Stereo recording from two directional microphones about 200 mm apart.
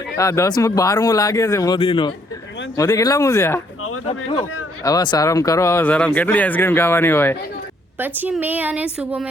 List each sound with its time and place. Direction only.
0.2 s speech: 15° left (ahead or behind)
4.8 s speech: 20° left (ahead or behind)
7.9 s speech: 10° right (ahead or behind)